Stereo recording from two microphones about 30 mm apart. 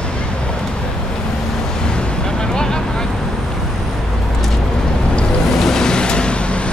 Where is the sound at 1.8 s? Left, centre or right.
Left.